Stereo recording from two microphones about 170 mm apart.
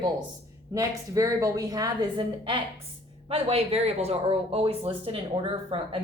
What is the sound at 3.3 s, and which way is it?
Speech, 35° right (ahead or behind).